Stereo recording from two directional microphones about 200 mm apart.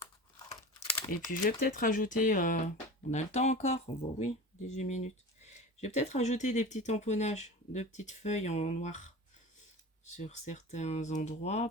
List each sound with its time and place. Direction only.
0.5 s typing: 30° left (ahead or behind)
1.5 s speech: 45° left (ahead or behind)